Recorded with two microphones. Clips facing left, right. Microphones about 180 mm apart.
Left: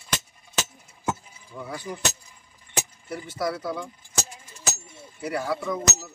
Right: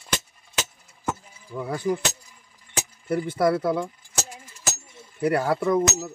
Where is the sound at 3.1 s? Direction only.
55° right (ahead or behind).